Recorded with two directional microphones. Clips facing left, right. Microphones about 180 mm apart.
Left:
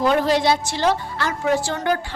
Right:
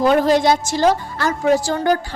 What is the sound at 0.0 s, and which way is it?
A woman's voice, 45° right (ahead or behind).